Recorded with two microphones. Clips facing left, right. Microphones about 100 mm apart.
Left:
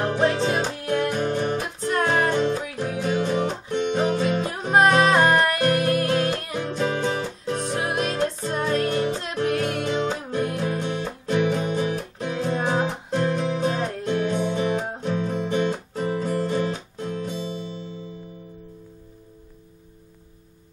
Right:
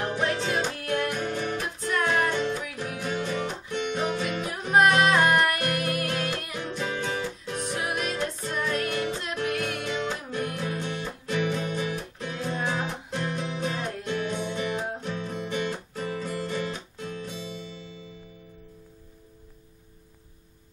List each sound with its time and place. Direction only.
0.0 s music: 35° left (ahead or behind)
1.2 s music: 35° left (ahead or behind)
15.2 s guitar: 30° left (ahead or behind)
15.9 s music: 40° left (ahead or behind)